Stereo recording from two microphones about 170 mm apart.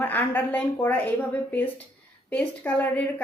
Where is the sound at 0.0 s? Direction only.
10° left (ahead or behind).